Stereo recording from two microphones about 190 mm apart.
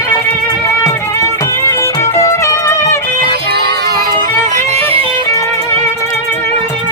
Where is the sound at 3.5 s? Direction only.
60° right (ahead or behind).